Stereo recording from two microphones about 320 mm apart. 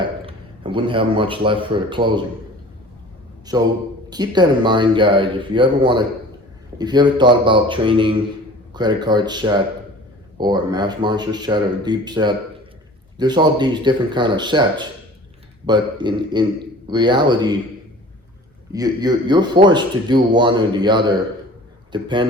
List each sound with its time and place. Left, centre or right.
0.3 s a man's voice: centre
3.5 s speech: centre
18.7 s speech: centre